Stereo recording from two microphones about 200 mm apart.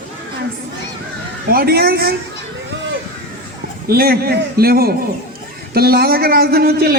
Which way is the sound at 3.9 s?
50° right (ahead or behind).